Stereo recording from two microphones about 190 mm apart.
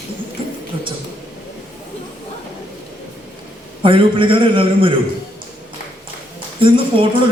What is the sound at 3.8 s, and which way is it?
A man's voice, 30° right (ahead or behind).